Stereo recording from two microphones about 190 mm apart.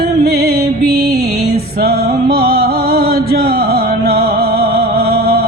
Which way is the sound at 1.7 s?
55° right (ahead or behind).